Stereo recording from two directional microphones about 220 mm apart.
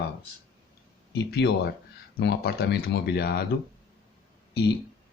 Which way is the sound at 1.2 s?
45° left (ahead or behind).